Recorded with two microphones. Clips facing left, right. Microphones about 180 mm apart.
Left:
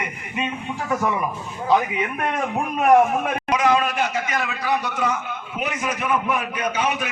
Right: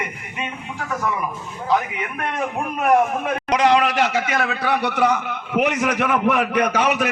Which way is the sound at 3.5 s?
70° right (ahead or behind).